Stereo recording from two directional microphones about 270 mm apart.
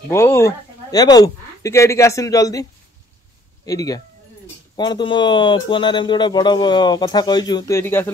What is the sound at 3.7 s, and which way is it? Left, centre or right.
Speech, centre.